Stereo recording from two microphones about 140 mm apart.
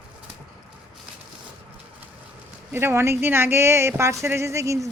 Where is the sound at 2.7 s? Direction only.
20° right (ahead or behind).